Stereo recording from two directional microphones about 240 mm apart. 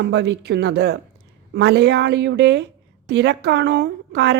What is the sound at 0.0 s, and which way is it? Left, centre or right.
A woman's voice, right.